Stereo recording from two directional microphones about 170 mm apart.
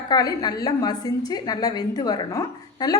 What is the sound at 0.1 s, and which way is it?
A woman's voice, 25° left (ahead or behind).